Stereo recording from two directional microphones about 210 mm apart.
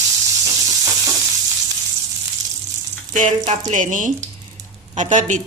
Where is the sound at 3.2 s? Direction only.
35° right (ahead or behind).